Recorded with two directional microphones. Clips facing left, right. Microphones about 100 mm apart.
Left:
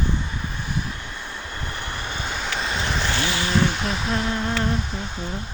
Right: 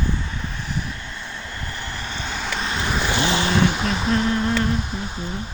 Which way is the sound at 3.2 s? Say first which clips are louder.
Right 4 dB; 25° right (ahead or behind).